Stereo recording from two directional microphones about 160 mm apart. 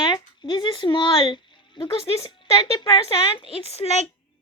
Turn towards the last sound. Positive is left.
turn(degrees=40)  # may be behind; listen again after turning